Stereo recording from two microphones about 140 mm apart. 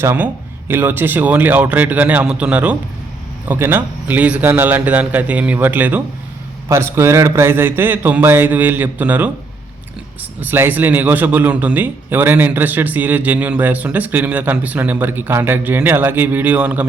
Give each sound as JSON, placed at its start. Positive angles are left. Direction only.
{"t": 0.0, "sound": "a man's voice", "side_deg": -15}
{"t": 10.4, "sound": "a man's voice", "side_deg": -15}